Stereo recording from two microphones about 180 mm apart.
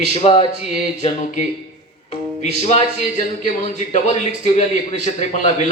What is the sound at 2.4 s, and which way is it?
A man's voice, 35° left (ahead or behind).